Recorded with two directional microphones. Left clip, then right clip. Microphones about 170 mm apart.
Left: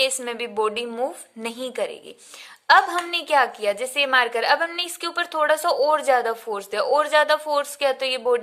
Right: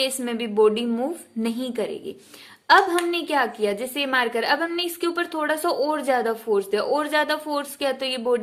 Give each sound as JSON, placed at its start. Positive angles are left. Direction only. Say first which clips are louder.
{"t": 0.0, "sound": "a woman's voice", "louder": "left 2 dB", "side_deg": 25}